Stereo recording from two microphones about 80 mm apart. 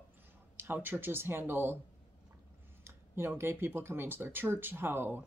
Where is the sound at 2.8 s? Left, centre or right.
Right.